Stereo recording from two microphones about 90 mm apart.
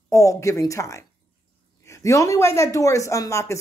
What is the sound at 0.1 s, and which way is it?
Speech, 35° left (ahead or behind).